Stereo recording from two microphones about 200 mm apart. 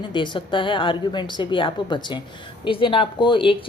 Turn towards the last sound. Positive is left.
turn(degrees=25)  # may be behind; listen again after turning